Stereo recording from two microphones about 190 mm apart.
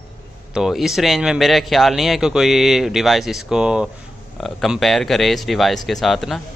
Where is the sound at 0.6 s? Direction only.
Centre (ahead or behind).